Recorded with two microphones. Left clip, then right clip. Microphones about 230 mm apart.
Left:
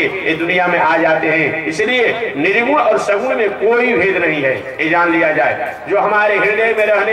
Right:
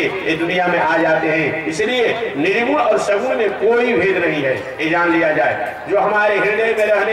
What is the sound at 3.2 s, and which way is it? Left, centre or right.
A man's voice, centre.